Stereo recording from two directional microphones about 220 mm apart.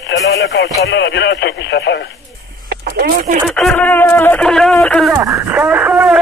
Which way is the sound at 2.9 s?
40° right (ahead or behind).